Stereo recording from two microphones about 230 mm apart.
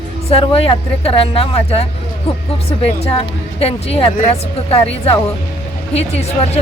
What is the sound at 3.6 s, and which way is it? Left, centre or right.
Speech, left.